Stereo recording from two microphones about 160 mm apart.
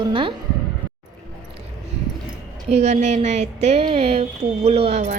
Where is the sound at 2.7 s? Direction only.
45° right (ahead or behind).